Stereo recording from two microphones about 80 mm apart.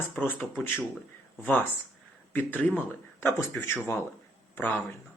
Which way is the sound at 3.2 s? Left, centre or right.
Left.